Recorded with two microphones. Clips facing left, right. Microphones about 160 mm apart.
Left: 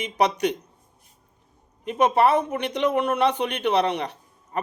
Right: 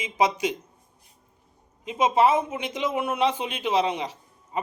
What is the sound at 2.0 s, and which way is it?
Speech, 65° left (ahead or behind).